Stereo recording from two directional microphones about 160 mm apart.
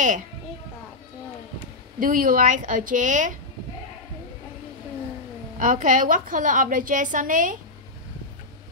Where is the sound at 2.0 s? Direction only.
60° right (ahead or behind).